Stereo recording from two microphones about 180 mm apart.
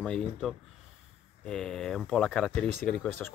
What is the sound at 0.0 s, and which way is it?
Speech, 5° left (ahead or behind).